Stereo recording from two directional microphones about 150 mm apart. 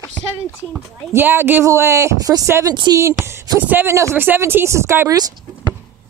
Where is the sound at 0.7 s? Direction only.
15° right (ahead or behind); by 3.0 s 30° right (ahead or behind).